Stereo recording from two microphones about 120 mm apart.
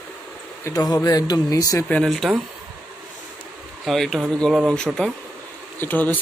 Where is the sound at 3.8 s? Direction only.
Centre (ahead or behind).